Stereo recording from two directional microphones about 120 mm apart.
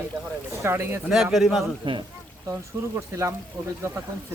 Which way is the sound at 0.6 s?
20° right (ahead or behind).